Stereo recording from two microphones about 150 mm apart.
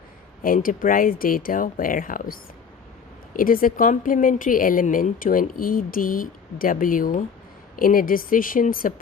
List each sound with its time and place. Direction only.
0.4 s a woman's voice: 65° left (ahead or behind)